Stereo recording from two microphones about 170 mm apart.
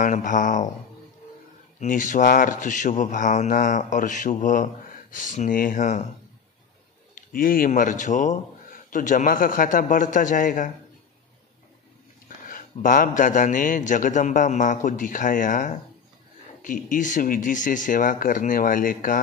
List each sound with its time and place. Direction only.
0.0 s a man's voice: 50° left (ahead or behind)
1.8 s a man's voice: 50° left (ahead or behind)
7.2 s a man's voice: 55° left (ahead or behind)
12.4 s a man's voice: 50° left (ahead or behind)